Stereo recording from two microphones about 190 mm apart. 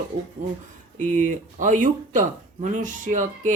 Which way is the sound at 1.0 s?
45° right (ahead or behind).